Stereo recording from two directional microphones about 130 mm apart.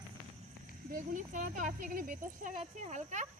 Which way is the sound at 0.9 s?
85° right.